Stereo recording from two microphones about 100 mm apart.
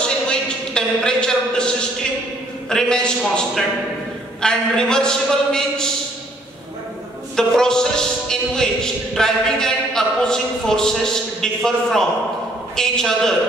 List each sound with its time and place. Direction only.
0.3 s a sound: 10° left (ahead or behind)
2.7 s a man's voice: 5° left (ahead or behind)
7.3 s a man's voice: 5° left (ahead or behind)